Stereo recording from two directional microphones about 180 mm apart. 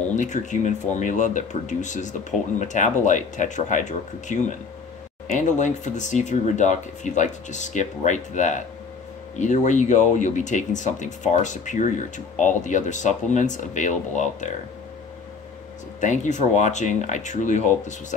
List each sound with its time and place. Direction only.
0.1 s speech: 40° left (ahead or behind)
16.0 s speech: 40° left (ahead or behind)